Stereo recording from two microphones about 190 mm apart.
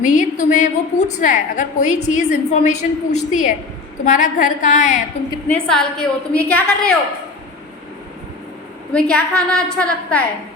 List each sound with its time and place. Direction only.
0.0 s a woman's voice: 40° left (ahead or behind)
5.5 s a woman's voice: 5° left (ahead or behind)
8.9 s a woman's voice: 5° left (ahead or behind)